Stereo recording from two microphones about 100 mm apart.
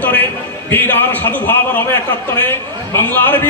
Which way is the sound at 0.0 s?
20° left (ahead or behind).